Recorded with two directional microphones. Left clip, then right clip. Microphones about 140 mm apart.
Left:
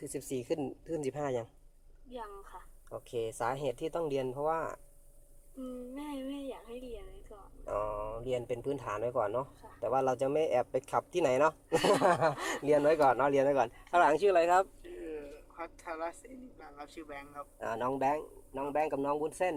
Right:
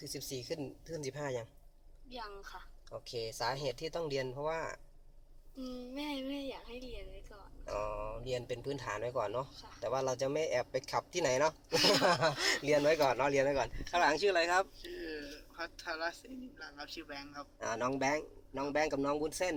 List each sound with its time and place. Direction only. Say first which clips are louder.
0.0 s speech: left 4 dB; 55° left (ahead or behind)
2.9 s speech: left 4 dB; 40° left (ahead or behind)
3.9 s speech: left 3 dB; 20° left (ahead or behind)
4.5 s speech: left 4 dB; 40° left (ahead or behind)
5.9 s a woman's voice: right 4 dB; 5° right (ahead or behind)
7.8 s a man's voice: left 3 dB; 20° left (ahead or behind)
10.3 s speech: left 4 dB; 45° left (ahead or behind)
11.8 s a woman's voice: even; centre (ahead or behind)
12.2 s a man's voice: left 1 dB; 10° left (ahead or behind)
13.6 s speech: left 5 dB; 40° left (ahead or behind)
14.9 s a woman's voice: left 1 dB; centre (ahead or behind)
17.6 s a man's voice: left 2 dB; 20° left (ahead or behind)